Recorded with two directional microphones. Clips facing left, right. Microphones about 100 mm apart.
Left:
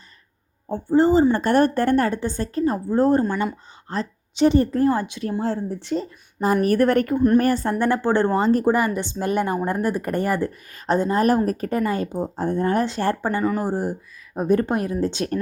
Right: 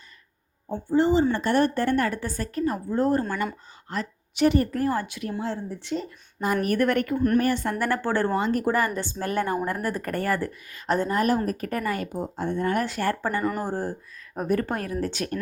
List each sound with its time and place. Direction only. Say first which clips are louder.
0.7 s a woman's voice: left 4 dB; 35° left (ahead or behind)
2.0 s a woman's voice: left 4 dB; 25° left (ahead or behind)
5.4 s speech: left 7 dB; 40° left (ahead or behind)
7.8 s a woman's voice: left 5 dB; 20° left (ahead or behind)
8.7 s a woman's voice: left 3 dB; 15° left (ahead or behind)
10.5 s speech: left 1 dB; 40° left (ahead or behind)
10.8 s a woman's voice: left 4 dB; 20° left (ahead or behind)
13.6 s a woman's voice: left 4 dB; 15° left (ahead or behind)